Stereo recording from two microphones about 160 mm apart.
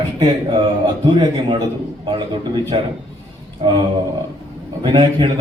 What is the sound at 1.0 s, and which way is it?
Speech, 30° right (ahead or behind).